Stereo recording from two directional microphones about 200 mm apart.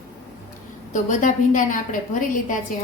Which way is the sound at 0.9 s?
40° left (ahead or behind).